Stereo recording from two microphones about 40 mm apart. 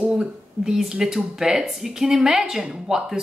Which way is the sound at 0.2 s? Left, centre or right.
Centre.